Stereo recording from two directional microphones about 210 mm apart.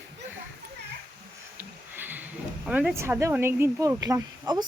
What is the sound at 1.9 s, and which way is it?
Speech, 10° right (ahead or behind).